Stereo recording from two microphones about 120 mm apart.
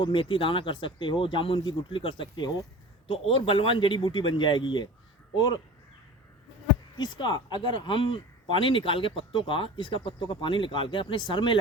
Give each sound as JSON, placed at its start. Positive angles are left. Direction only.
{"t": 0.0, "sound": "speech", "side_deg": 45}
{"t": 6.9, "sound": "speech", "side_deg": 35}